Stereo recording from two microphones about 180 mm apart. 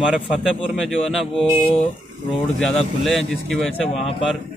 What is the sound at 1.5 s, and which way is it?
Speech, 30° left (ahead or behind).